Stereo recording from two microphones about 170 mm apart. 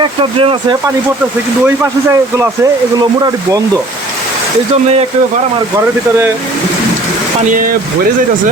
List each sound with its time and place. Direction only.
0.0 s speech: 30° right (ahead or behind)
1.6 s speech: 15° right (ahead or behind)
7.5 s speech: 55° right (ahead or behind)